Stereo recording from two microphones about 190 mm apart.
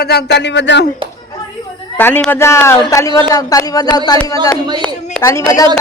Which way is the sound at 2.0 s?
10° left (ahead or behind).